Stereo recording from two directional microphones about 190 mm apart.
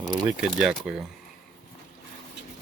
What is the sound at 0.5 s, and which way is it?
Speech, 5° right (ahead or behind).